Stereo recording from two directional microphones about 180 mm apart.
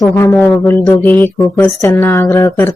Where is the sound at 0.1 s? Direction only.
15° left (ahead or behind).